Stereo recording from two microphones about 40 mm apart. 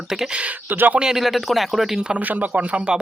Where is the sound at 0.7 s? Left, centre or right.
Right.